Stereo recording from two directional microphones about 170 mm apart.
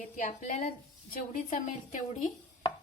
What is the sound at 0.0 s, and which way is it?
A woman's voice, 45° left (ahead or behind).